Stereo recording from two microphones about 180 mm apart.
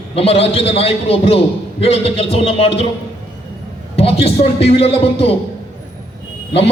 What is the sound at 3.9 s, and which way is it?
A man's voice, 35° left (ahead or behind).